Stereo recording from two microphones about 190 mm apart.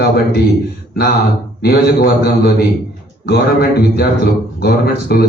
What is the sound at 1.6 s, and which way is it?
A man's voice, 55° left (ahead or behind).